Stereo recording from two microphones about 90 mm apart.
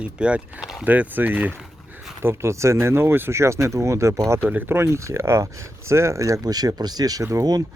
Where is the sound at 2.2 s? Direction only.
30° right (ahead or behind).